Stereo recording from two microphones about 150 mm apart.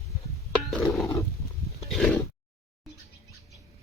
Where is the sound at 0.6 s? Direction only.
Centre (ahead or behind).